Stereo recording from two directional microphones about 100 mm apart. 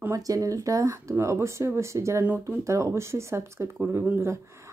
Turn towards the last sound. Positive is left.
turn(degrees=-30)  # may be behind; listen again after turning